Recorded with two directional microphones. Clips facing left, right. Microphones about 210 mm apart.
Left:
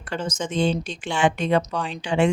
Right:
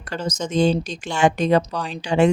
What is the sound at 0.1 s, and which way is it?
Speech, 40° right (ahead or behind).